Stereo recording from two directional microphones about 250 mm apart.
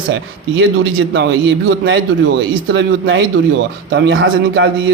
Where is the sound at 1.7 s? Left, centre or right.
Right.